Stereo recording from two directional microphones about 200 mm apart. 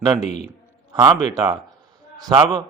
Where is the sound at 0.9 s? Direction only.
15° right (ahead or behind).